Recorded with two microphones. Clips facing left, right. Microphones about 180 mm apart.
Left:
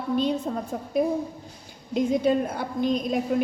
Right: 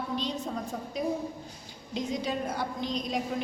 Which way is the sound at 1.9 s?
55° left (ahead or behind).